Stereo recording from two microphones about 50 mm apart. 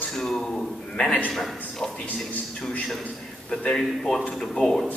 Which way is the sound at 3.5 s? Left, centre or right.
Centre.